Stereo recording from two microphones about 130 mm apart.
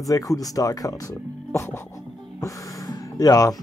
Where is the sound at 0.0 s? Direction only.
25° left (ahead or behind).